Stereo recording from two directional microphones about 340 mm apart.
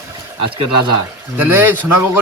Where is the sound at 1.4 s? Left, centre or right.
Centre.